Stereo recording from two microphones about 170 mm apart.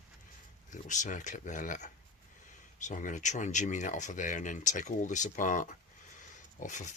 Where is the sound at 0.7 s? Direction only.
45° left (ahead or behind).